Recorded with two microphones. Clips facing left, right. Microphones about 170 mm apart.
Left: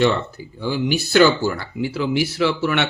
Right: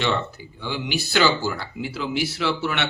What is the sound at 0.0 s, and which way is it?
Speech, 40° left (ahead or behind).